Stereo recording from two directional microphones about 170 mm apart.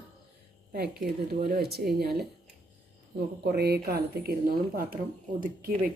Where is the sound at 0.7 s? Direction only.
65° right (ahead or behind).